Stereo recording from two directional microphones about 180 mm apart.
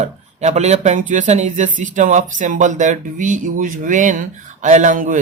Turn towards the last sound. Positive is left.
turn(degrees=-45)  # may be behind; listen again after turning